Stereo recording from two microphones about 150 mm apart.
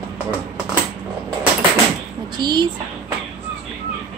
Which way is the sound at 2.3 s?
30° right (ahead or behind).